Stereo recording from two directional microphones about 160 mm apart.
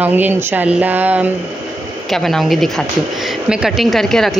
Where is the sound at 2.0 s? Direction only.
Centre (ahead or behind).